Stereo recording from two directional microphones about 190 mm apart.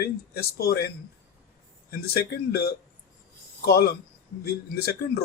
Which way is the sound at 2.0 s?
55° left (ahead or behind).